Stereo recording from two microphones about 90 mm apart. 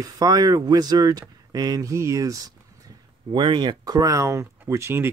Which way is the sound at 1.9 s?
35° right (ahead or behind).